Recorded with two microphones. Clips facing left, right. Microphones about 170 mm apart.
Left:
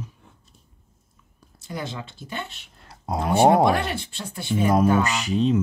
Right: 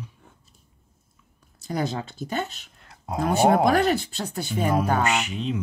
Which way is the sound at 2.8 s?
35° left (ahead or behind).